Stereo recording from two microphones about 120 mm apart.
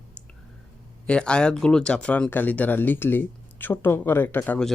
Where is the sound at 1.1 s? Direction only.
10° left (ahead or behind).